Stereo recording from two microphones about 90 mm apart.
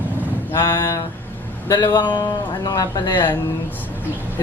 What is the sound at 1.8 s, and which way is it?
A man's voice, 55° left (ahead or behind).